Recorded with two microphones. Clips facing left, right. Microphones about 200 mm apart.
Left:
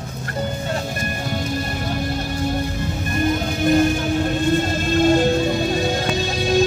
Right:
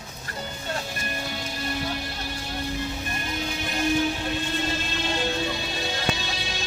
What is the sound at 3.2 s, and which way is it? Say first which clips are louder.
Music: left 15 dB; 50° left (ahead or behind).